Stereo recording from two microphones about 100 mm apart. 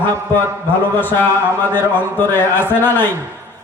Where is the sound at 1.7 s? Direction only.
20° left (ahead or behind).